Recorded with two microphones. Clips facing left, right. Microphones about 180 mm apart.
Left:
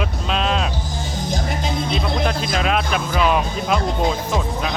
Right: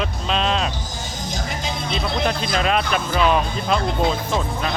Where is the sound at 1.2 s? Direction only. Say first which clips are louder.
Left 3 dB; 55° left (ahead or behind).